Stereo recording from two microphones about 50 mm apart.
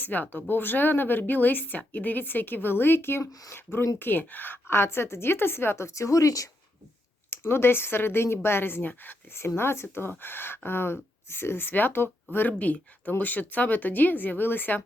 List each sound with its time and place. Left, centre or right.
0.0 s speech: left
4.7 s a woman's voice: left
7.3 s speech: left
9.3 s speech: left
12.5 s speech: left